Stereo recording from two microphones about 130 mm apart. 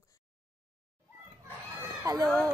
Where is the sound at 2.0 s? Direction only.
30° right (ahead or behind).